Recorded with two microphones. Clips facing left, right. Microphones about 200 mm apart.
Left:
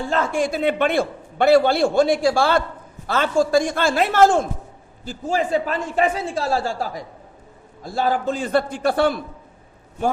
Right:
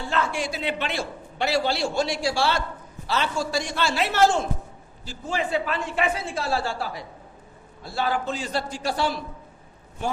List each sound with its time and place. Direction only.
0.1 s a man's voice: 45° left (ahead or behind)